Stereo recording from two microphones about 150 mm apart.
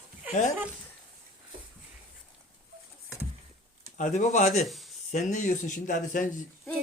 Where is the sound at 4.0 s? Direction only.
55° left (ahead or behind).